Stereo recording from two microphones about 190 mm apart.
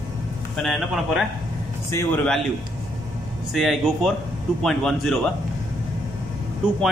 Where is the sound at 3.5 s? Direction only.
Centre (ahead or behind).